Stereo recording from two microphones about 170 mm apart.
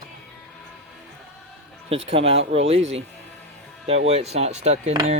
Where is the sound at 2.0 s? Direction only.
35° right (ahead or behind).